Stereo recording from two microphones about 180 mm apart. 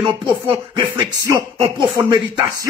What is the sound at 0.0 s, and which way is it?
Speech, 30° right (ahead or behind).